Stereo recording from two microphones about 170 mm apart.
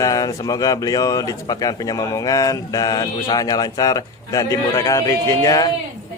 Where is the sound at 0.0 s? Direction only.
20° left (ahead or behind).